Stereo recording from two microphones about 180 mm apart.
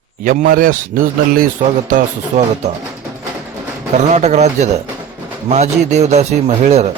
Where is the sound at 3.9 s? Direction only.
40° right (ahead or behind).